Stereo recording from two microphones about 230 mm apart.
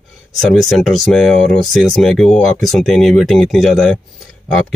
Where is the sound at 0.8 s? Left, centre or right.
Centre.